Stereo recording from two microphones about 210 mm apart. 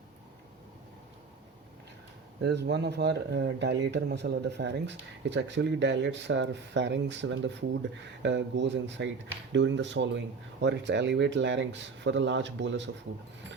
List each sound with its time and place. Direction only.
2.4 s speech: 55° right (ahead or behind)